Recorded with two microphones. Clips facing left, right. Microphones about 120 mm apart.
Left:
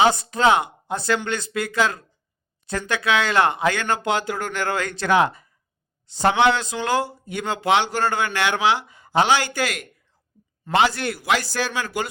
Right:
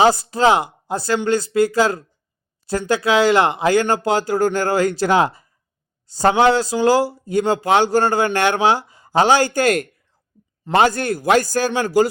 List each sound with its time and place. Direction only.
0.0 s speech: 35° right (ahead or behind)